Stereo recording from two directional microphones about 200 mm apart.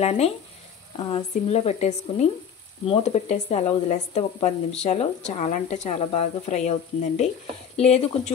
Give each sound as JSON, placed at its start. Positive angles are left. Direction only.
{"t": 0.0, "sound": "speech", "side_deg": 30}